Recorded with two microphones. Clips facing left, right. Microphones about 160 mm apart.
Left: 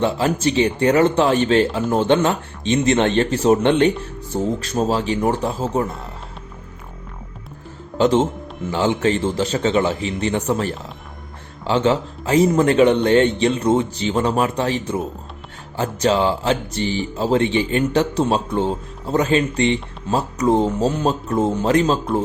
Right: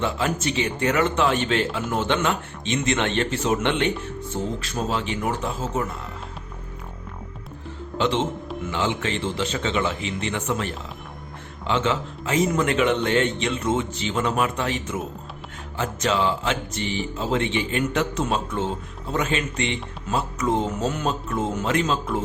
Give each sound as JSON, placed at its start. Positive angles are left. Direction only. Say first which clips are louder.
{"t": 0.0, "sound": "speech", "louder": "left 6 dB", "side_deg": 35}
{"t": 7.9, "sound": "speech", "louder": "left 7 dB", "side_deg": 40}